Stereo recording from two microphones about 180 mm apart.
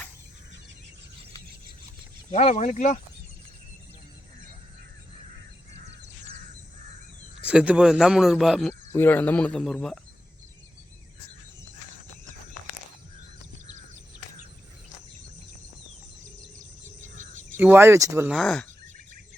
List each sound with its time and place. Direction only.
2.3 s speech: 35° left (ahead or behind)
7.4 s speech: 5° right (ahead or behind)
8.9 s speech: 10° left (ahead or behind)
16.6 s a sound: 45° right (ahead or behind)
17.6 s speech: 10° right (ahead or behind)
18.3 s speech: centre (ahead or behind)